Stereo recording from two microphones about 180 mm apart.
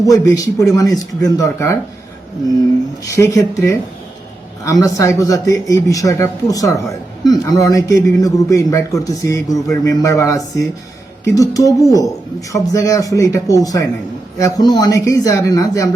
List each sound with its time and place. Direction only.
0.0 s speech: 20° left (ahead or behind)
3.0 s speech: 15° left (ahead or behind)